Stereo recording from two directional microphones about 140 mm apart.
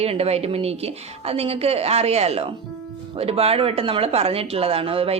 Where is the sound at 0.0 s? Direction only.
45° right (ahead or behind).